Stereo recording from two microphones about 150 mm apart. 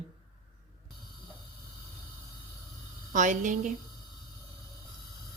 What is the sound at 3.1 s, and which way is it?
Speech, 55° right (ahead or behind).